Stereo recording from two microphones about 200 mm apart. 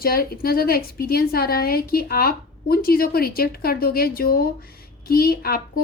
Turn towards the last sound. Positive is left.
turn(degrees=50)  # may be behind; listen again after turning